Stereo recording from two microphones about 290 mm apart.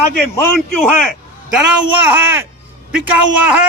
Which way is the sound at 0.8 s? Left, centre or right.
Centre.